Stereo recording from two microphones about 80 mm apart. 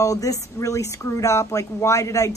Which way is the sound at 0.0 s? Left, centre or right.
Left.